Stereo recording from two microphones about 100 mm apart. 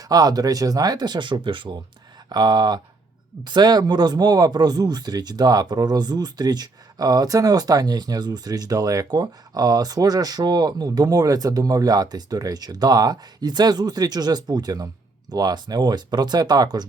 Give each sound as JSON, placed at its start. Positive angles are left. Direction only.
{"t": 0.0, "sound": "speech", "side_deg": -40}
{"t": 2.3, "sound": "speech", "side_deg": -45}